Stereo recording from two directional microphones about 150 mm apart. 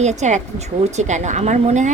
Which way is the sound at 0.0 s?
50° right (ahead or behind).